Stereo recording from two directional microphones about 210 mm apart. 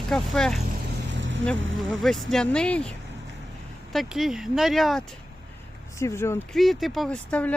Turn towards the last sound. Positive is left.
turn(degrees=5)  # may be behind; listen again after turning